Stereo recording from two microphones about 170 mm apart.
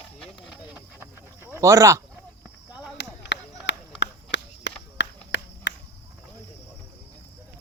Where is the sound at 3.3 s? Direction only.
90° left.